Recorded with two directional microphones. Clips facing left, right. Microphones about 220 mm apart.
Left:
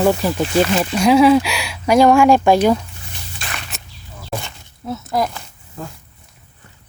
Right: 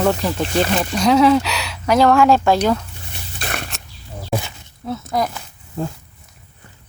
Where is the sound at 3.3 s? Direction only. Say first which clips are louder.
Right 5 dB; 45° right (ahead or behind).